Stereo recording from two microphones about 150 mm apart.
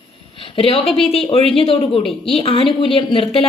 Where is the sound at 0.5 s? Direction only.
35° left (ahead or behind).